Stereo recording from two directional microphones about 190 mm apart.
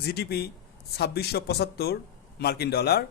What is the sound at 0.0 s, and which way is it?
Speech, 60° left (ahead or behind).